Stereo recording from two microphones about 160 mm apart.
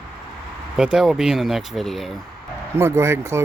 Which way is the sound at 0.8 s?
5° right (ahead or behind).